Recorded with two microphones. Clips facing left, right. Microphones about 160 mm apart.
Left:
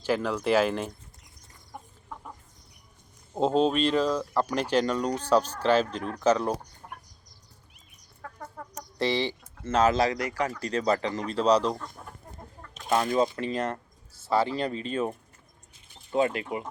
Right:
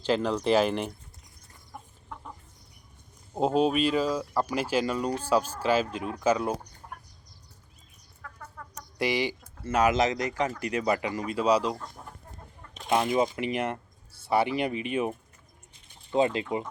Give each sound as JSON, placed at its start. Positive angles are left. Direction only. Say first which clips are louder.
{"t": 0.0, "sound": "speech", "louder": "right 1 dB", "side_deg": -20}
{"t": 3.3, "sound": "speech", "louder": "left 1 dB", "side_deg": -10}
{"t": 8.2, "sound": "chicken", "louder": "left 4 dB", "side_deg": 40}
{"t": 9.0, "sound": "speech", "louder": "left 1 dB", "side_deg": -10}
{"t": 12.9, "sound": "speech", "louder": "even", "side_deg": -15}
{"t": 16.1, "sound": "speech", "louder": "right 1 dB", "side_deg": -25}